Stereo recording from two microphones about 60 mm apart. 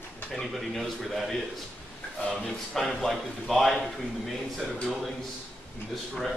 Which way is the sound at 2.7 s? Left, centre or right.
Centre.